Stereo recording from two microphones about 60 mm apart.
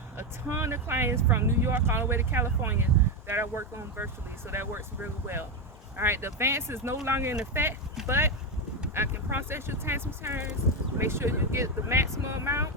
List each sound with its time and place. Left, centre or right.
0.2 s speech: right